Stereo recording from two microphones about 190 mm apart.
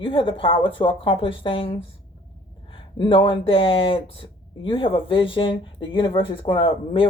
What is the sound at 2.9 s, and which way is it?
Speech, 25° left (ahead or behind).